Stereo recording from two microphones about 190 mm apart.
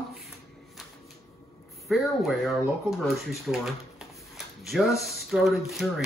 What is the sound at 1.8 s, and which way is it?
Speech, centre (ahead or behind).